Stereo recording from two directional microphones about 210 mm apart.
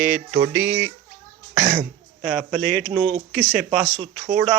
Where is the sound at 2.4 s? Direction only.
5° left (ahead or behind).